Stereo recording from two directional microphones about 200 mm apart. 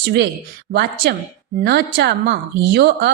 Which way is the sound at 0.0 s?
55° right (ahead or behind).